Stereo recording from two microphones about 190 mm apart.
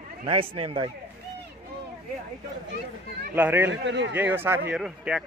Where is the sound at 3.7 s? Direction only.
70° right (ahead or behind).